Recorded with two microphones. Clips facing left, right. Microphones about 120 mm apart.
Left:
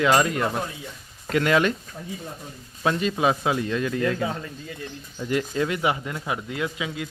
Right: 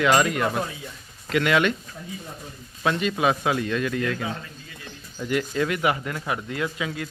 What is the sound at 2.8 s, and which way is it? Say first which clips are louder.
Speech: even; 30° left (ahead or behind).